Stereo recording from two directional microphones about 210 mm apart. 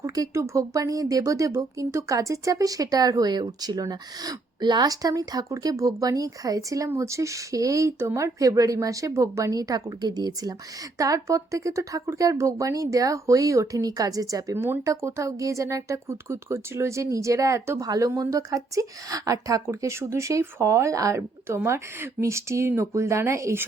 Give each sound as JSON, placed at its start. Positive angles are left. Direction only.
{"t": 0.0, "sound": "speech", "side_deg": -15}